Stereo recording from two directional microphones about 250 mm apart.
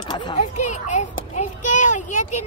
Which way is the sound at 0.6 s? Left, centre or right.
Left.